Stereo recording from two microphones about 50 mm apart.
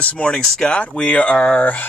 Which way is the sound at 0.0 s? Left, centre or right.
Left.